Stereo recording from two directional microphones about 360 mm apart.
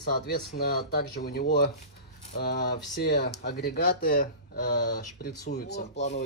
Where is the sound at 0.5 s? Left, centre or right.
Left.